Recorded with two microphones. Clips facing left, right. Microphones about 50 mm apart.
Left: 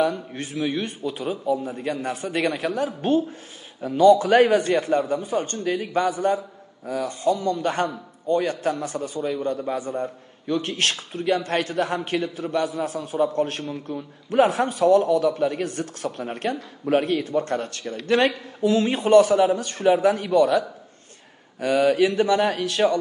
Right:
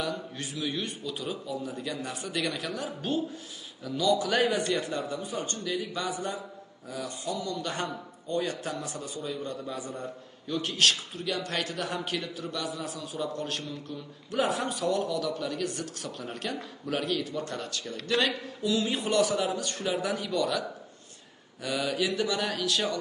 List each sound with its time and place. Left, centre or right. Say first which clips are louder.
0.0 s a man's voice: left 10 dB; left